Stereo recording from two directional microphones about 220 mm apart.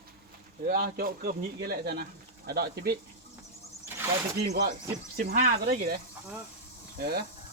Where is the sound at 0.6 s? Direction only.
40° right (ahead or behind).